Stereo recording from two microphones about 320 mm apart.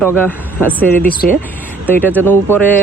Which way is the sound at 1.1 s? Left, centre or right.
Left.